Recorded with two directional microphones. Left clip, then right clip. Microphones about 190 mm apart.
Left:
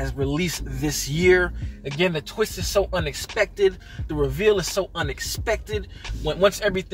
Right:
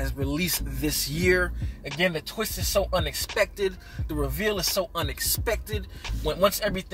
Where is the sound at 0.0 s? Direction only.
15° right (ahead or behind).